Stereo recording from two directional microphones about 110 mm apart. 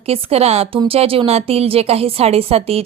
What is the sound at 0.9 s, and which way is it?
A woman's voice, 55° right (ahead or behind).